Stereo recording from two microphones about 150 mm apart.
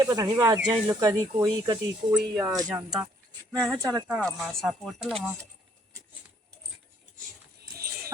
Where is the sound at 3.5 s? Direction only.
5° left (ahead or behind).